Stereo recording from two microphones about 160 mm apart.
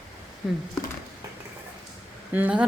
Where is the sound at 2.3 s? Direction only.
10° right (ahead or behind).